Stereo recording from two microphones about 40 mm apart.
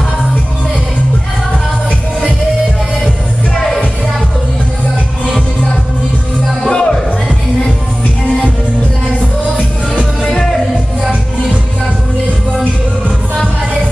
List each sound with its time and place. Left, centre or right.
6.7 s music: left
10.2 s music: centre